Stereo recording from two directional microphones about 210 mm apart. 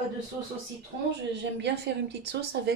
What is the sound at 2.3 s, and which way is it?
Speech, 50° right (ahead or behind).